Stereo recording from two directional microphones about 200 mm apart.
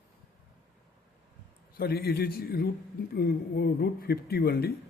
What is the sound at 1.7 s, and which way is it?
A man's voice, 50° left (ahead or behind).